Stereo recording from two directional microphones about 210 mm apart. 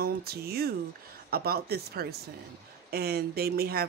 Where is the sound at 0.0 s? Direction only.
45° right (ahead or behind).